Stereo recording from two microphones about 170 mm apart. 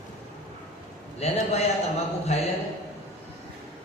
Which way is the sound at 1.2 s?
40° left (ahead or behind).